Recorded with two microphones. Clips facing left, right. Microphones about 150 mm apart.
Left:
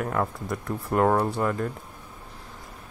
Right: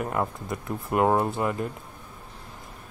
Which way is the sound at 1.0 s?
15° right (ahead or behind).